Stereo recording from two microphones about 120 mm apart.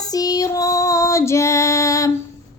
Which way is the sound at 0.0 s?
30° left (ahead or behind).